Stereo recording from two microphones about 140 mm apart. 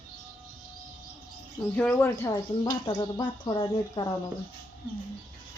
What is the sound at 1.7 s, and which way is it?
Speech, 15° left (ahead or behind).